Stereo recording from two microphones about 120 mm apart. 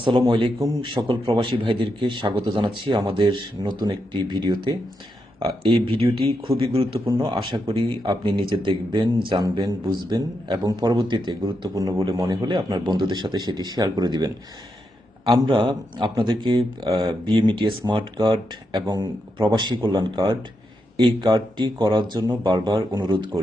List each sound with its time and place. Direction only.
0.0 s a man's voice: 45° right (ahead or behind)
5.6 s a man's voice: 45° right (ahead or behind)